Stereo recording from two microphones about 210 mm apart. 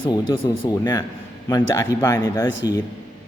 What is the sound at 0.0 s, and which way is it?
Speech, 20° left (ahead or behind).